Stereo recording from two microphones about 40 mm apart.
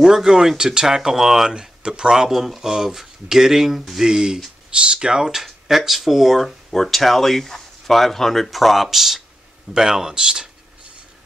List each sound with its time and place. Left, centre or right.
0.0 s speech: centre
2.2 s speech: centre
4.6 s speech: right